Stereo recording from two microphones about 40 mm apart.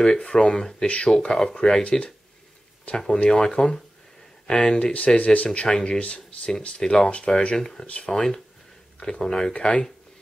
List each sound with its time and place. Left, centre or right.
0.0 s speech: left
0.8 s speech: left
1.2 s speech: centre
3.3 s speech: centre
4.9 s speech: left
5.7 s speech: centre
5.9 s speech: left
6.8 s speech: centre
7.8 s speech: left
8.1 s speech: centre